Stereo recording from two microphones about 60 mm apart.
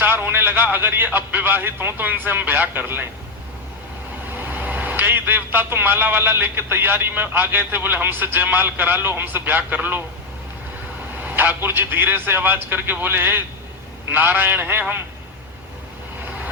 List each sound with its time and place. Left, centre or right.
0.0 s speech: right
4.3 s speech: right
11.2 s speech: right